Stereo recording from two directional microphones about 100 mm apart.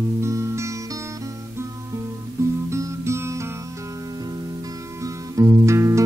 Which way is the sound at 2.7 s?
30° right (ahead or behind).